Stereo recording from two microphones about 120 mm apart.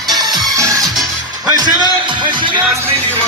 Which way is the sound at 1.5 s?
35° right (ahead or behind).